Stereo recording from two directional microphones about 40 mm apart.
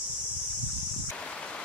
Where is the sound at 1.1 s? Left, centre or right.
Left.